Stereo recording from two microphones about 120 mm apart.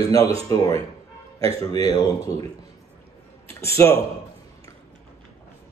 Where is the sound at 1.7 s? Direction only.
60° right (ahead or behind).